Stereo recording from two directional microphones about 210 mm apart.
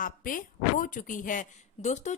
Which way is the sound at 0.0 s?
40° left (ahead or behind).